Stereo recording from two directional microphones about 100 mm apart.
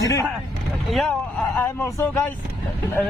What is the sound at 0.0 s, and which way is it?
Vehicle, 30° left (ahead or behind).